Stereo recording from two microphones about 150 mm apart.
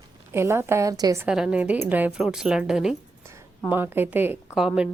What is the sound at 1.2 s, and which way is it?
A woman's voice, 5° right (ahead or behind).